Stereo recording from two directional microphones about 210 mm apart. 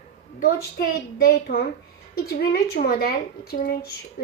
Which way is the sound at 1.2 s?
50° left (ahead or behind).